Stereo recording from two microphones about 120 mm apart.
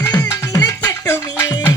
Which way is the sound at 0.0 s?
25° left (ahead or behind).